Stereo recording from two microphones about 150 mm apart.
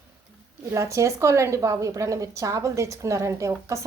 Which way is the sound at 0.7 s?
20° right (ahead or behind).